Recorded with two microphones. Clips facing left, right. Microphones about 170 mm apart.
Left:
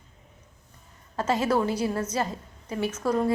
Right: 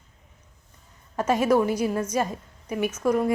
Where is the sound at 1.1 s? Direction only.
10° right (ahead or behind).